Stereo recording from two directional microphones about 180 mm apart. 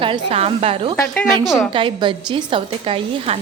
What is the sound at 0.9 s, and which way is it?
Speech, 5° left (ahead or behind).